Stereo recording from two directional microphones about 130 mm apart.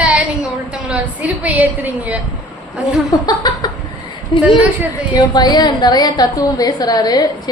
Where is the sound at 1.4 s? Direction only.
10° right (ahead or behind).